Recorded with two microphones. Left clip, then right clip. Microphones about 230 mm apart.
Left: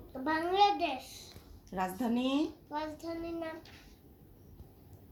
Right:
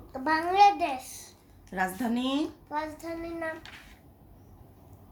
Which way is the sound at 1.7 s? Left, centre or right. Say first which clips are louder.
Right 4 dB; right.